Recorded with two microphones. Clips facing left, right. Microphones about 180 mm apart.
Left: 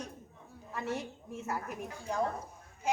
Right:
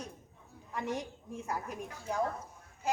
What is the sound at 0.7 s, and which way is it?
A woman's voice, 15° right (ahead or behind).